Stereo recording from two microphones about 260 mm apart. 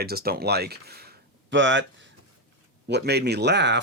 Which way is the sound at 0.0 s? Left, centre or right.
Right.